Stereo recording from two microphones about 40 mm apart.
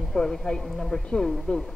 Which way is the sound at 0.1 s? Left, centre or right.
Centre.